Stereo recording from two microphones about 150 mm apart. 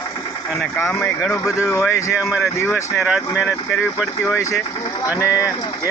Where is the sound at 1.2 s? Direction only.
20° left (ahead or behind).